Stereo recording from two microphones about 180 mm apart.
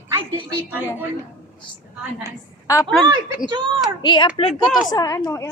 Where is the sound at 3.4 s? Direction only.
25° right (ahead or behind).